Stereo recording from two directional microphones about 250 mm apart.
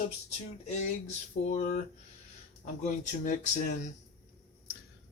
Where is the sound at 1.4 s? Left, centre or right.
Left.